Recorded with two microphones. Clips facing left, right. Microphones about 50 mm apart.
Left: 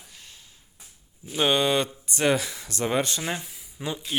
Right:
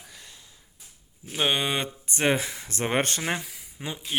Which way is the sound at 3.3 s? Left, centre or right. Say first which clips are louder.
Right 2 dB; right.